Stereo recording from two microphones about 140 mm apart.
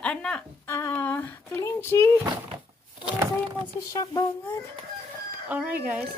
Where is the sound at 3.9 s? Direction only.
25° left (ahead or behind).